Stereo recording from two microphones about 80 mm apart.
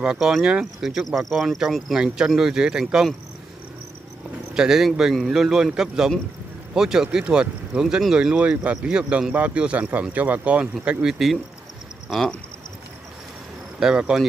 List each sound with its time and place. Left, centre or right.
0.0 s speech: centre
4.6 s speech: centre
13.7 s speech: centre